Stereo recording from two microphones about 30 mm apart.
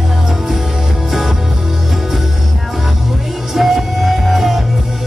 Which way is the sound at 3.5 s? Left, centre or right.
Centre.